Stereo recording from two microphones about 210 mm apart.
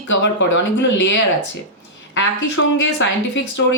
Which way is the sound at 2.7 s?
60° left (ahead or behind).